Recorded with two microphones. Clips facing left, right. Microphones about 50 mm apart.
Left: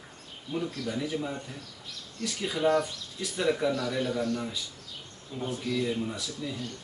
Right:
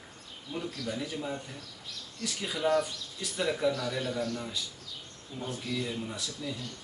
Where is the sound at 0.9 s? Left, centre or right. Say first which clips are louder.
Left 3 dB; centre.